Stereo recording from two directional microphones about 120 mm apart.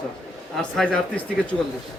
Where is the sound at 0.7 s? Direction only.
10° left (ahead or behind).